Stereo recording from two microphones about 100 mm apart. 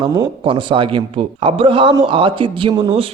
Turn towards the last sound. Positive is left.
turn(degrees=-60)  # may be behind; listen again after turning